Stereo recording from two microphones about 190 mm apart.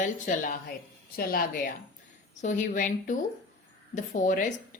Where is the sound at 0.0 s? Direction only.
40° left (ahead or behind).